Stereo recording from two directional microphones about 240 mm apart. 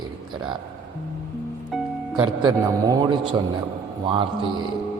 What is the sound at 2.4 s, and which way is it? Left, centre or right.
Speech, centre.